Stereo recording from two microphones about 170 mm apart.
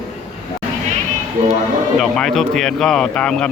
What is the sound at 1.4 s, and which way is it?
Speech, 50° right (ahead or behind).